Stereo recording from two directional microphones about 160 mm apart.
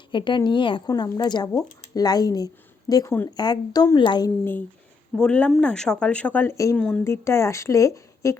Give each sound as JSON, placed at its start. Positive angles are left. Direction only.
{"t": 0.1, "sound": "a woman's voice", "side_deg": 30}
{"t": 5.1, "sound": "speech", "side_deg": 5}
{"t": 6.7, "sound": "speech", "side_deg": 5}
{"t": 7.0, "sound": "speech", "side_deg": 15}